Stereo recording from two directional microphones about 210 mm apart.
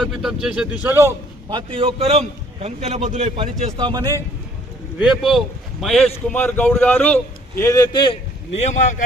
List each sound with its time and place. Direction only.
0.0 s a man's voice: centre (ahead or behind)
1.5 s a man's voice: 25° right (ahead or behind)
4.9 s a man's voice: centre (ahead or behind); by 8.1 s 20° left (ahead or behind)
8.5 s speech: 35° left (ahead or behind)